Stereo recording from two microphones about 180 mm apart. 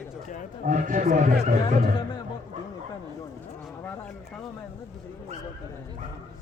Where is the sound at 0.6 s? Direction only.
45° right (ahead or behind).